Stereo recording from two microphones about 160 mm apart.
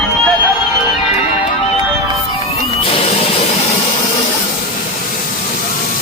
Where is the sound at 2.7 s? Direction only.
40° left (ahead or behind).